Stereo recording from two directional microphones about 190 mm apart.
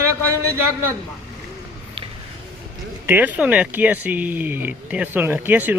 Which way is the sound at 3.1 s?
10° right (ahead or behind).